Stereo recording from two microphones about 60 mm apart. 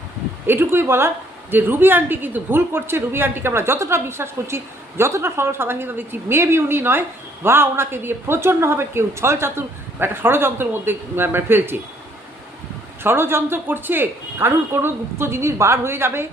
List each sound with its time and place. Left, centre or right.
0.4 s a woman's voice: right
13.0 s speech: right